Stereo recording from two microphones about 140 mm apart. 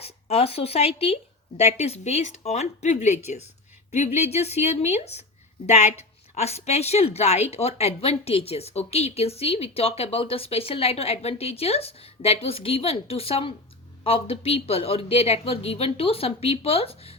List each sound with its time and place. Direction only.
0.0 s a woman's voice: 45° left (ahead or behind)